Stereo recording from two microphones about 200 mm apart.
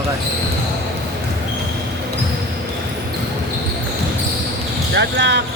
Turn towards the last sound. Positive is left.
turn(degrees=-55)  # may be behind; listen again after turning